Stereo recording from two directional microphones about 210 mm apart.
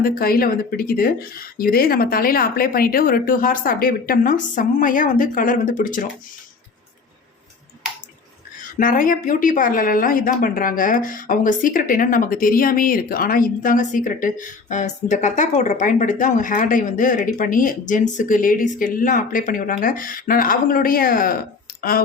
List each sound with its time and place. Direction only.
0.0 s speech: 45° left (ahead or behind)
8.8 s speech: 40° left (ahead or behind)